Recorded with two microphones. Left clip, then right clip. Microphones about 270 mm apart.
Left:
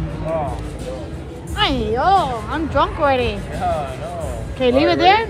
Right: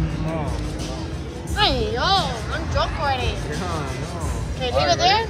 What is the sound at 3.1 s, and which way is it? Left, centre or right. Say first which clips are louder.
Speech: left 6 dB; centre.